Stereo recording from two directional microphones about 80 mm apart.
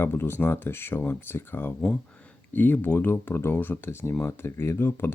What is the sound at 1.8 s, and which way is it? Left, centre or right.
Speech, centre.